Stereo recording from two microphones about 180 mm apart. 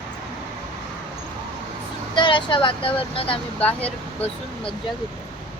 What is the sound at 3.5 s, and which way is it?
Speech, 10° left (ahead or behind).